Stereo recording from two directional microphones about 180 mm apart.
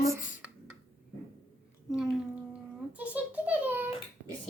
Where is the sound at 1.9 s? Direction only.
5° right (ahead or behind).